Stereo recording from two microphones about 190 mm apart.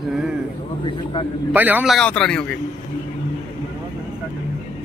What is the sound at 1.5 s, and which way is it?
A man's voice, 10° right (ahead or behind).